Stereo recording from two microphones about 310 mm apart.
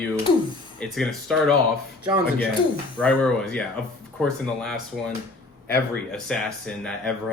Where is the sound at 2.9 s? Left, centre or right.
Centre.